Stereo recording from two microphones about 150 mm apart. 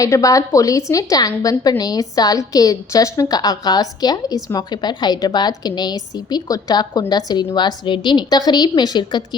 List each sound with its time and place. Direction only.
0.0 s a woman's voice: 20° left (ahead or behind)